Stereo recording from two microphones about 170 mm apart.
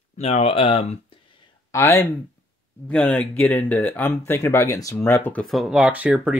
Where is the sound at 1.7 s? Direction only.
15° left (ahead or behind).